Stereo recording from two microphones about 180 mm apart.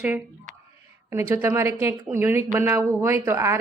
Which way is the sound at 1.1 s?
10° right (ahead or behind).